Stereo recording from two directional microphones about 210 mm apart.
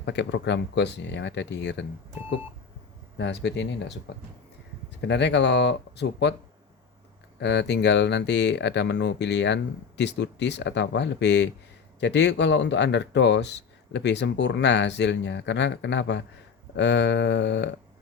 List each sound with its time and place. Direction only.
0.0 s speech: 55° left (ahead or behind)
3.2 s speech: 55° left (ahead or behind)
4.9 s speech: 55° left (ahead or behind)
7.3 s speech: 55° left (ahead or behind)